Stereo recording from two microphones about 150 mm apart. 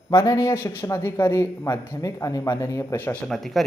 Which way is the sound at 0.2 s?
20° left (ahead or behind).